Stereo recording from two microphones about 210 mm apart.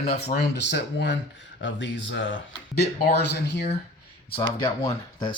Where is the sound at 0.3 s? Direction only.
55° left (ahead or behind).